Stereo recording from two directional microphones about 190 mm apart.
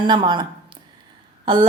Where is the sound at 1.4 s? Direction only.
25° right (ahead or behind).